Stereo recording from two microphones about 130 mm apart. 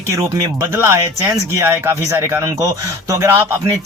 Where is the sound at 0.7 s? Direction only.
20° right (ahead or behind).